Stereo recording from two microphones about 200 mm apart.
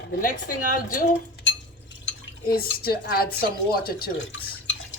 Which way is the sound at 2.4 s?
50° left (ahead or behind).